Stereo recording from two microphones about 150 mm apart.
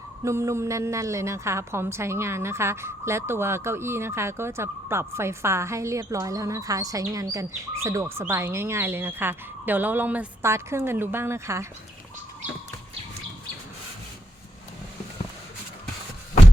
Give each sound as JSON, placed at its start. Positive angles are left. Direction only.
{"t": 0.3, "sound": "a woman's voice", "side_deg": -20}